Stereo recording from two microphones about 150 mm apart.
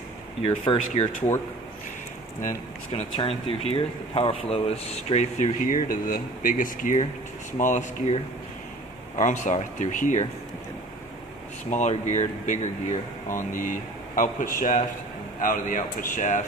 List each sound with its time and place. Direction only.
0.4 s speech: 35° left (ahead or behind)
0.8 s speech: 55° left (ahead or behind)
2.9 s speech: 45° left (ahead or behind)
11.7 s speech: 55° left (ahead or behind)
13.5 s speech: 60° left (ahead or behind)